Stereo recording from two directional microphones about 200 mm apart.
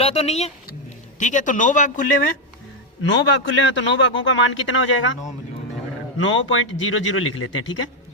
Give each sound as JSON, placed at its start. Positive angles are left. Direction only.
{"t": 0.0, "sound": "speech", "side_deg": 30}
{"t": 3.0, "sound": "a man's voice", "side_deg": 70}
{"t": 6.1, "sound": "a man's voice", "side_deg": 70}